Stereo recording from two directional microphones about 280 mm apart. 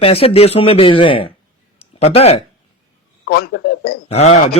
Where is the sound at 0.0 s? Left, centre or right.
Centre.